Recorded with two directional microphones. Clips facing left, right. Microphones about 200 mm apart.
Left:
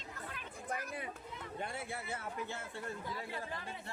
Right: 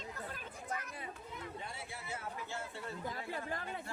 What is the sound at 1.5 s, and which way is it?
Speech, 55° left (ahead or behind).